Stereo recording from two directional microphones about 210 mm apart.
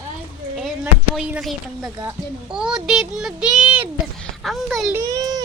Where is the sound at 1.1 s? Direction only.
5° right (ahead or behind).